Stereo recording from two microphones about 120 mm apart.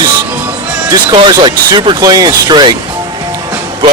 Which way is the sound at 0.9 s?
35° right (ahead or behind).